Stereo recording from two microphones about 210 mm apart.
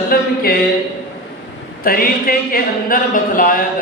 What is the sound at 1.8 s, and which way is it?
Speech, 45° left (ahead or behind).